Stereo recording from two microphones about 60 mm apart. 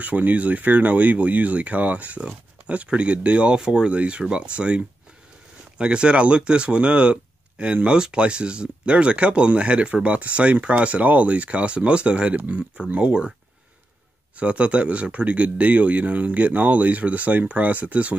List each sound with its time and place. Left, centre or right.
0.0 s speech: right
14.3 s speech: right